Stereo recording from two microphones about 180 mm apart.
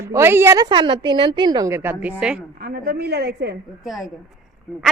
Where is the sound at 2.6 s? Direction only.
60° right (ahead or behind).